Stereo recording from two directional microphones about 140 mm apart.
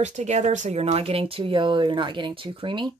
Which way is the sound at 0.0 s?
55° right (ahead or behind).